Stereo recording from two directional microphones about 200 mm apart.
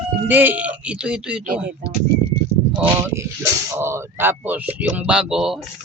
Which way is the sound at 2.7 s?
10° right (ahead or behind).